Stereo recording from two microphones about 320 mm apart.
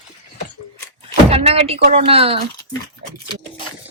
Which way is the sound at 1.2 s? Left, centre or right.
Centre.